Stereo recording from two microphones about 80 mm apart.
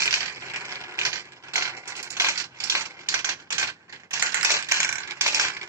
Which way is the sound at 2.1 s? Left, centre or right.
Right.